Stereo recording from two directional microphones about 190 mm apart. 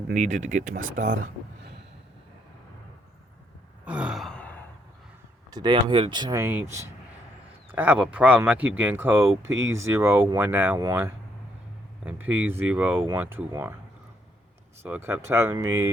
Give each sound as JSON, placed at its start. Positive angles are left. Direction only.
{"t": 0.1, "sound": "speech", "side_deg": -40}
{"t": 3.8, "sound": "sigh", "side_deg": -5}
{"t": 5.5, "sound": "speech", "side_deg": -20}
{"t": 6.4, "sound": "speech", "side_deg": -10}
{"t": 9.4, "sound": "speech", "side_deg": -90}
{"t": 9.7, "sound": "speech", "side_deg": -15}
{"t": 12.0, "sound": "speech", "side_deg": -10}
{"t": 14.8, "sound": "speech", "side_deg": -10}